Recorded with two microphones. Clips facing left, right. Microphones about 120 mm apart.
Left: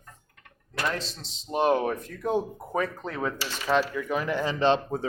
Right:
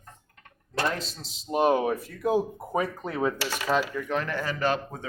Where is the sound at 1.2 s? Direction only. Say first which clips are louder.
Right 1 dB; 5° right (ahead or behind).